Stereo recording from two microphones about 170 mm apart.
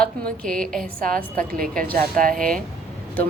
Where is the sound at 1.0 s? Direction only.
55° right (ahead or behind).